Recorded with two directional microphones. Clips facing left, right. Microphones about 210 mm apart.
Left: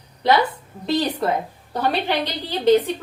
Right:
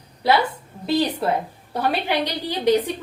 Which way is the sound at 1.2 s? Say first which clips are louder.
Even; 10° right (ahead or behind).